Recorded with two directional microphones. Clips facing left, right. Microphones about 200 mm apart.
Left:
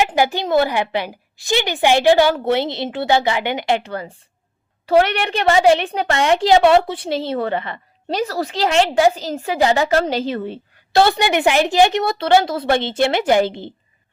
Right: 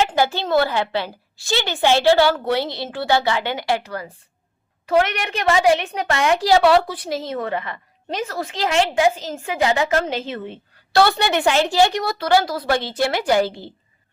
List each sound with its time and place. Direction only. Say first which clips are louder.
0.0 s a woman's voice: left 2 dB; 15° left (ahead or behind); by 10.6 s 35° left (ahead or behind)
10.9 s a woman's voice: left 2 dB; 20° left (ahead or behind)